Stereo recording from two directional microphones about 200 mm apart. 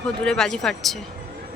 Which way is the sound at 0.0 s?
5° left (ahead or behind).